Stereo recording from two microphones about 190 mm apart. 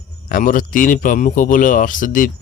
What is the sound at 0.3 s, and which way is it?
Speech, 45° left (ahead or behind).